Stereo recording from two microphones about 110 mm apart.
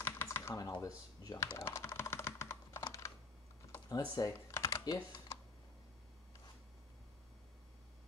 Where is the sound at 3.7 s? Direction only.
35° left (ahead or behind).